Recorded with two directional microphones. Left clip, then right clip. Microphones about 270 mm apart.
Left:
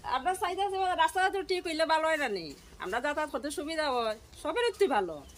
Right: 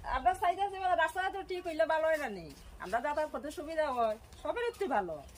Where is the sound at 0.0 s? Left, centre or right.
Centre.